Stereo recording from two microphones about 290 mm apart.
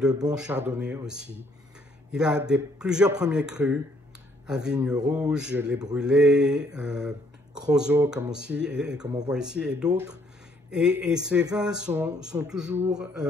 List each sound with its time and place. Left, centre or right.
0.3 s a man's voice: centre